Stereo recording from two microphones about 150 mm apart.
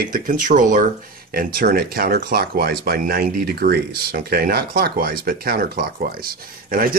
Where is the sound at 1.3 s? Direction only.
85° right.